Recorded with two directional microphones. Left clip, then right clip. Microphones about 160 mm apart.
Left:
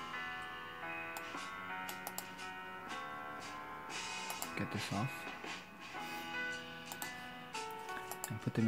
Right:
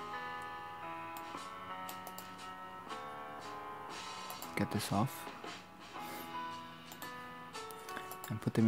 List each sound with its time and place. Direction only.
4.6 s speech: 40° right (ahead or behind)
8.5 s speech: 40° right (ahead or behind)